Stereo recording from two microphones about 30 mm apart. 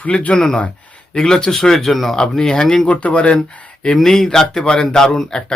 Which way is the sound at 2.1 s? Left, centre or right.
Left.